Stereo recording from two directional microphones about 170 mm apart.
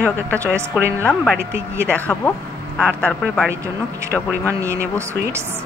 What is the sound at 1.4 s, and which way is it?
Speech, 15° right (ahead or behind).